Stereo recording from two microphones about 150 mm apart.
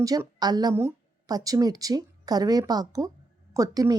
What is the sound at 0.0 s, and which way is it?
A woman's voice, 25° right (ahead or behind).